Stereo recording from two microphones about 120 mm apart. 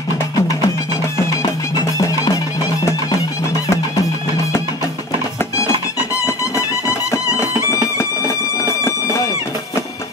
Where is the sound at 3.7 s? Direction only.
25° left (ahead or behind).